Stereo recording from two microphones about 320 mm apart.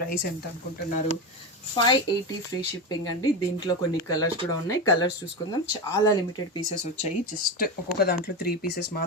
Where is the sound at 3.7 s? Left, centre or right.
Centre.